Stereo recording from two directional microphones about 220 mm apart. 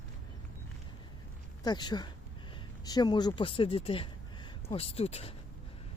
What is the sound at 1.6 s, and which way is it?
Speech, 20° left (ahead or behind).